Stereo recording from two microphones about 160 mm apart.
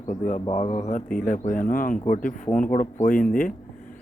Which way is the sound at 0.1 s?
45° left (ahead or behind).